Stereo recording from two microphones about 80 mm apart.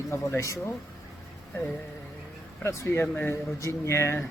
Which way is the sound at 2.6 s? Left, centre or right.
Left.